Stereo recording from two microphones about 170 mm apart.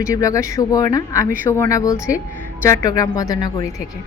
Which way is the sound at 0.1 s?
20° left (ahead or behind).